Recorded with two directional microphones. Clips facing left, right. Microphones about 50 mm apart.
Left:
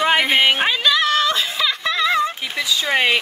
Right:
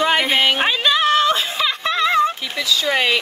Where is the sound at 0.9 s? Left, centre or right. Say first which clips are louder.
Right 3 dB; right.